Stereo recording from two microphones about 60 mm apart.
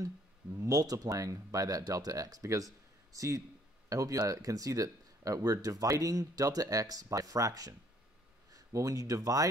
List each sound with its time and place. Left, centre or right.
0.0 s speech: right